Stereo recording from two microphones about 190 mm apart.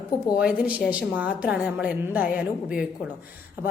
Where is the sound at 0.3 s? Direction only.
5° right (ahead or behind).